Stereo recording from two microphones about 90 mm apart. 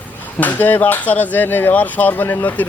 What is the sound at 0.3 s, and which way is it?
Speech, 20° left (ahead or behind).